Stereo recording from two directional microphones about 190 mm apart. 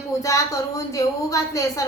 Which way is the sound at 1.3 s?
15° left (ahead or behind).